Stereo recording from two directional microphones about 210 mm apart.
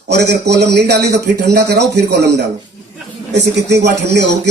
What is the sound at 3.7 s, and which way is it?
Speech, 55° right (ahead or behind).